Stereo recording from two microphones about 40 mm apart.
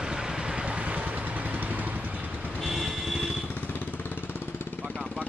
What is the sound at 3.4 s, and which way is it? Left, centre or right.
Vehicle, left.